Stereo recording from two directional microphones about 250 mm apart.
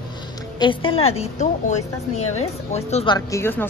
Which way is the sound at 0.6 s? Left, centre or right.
Centre.